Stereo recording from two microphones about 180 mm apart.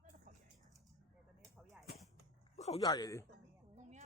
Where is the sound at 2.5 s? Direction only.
35° left (ahead or behind).